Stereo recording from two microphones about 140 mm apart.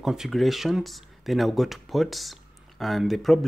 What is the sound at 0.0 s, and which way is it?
Speech, 5° right (ahead or behind).